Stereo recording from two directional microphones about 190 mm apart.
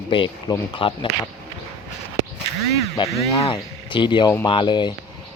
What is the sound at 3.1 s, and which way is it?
A man's voice, 30° left (ahead or behind).